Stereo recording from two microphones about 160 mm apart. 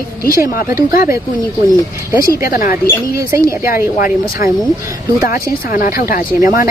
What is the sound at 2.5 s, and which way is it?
Speech, 60° left (ahead or behind).